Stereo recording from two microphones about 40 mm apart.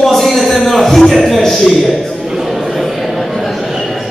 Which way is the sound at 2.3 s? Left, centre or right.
Centre.